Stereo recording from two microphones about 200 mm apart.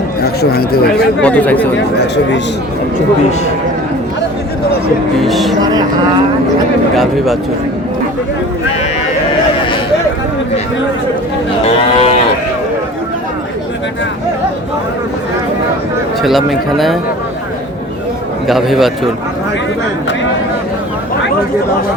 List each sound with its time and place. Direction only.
0.2 s speech: 50° left (ahead or behind)
1.2 s speech: 5° left (ahead or behind)
5.2 s speech: centre (ahead or behind)
6.9 s speech: centre (ahead or behind)
11.8 s moo: 30° left (ahead or behind)
16.2 s speech: centre (ahead or behind)
18.4 s speech: centre (ahead or behind)